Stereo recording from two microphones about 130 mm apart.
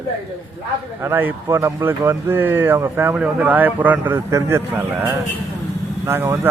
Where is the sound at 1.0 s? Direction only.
15° right (ahead or behind).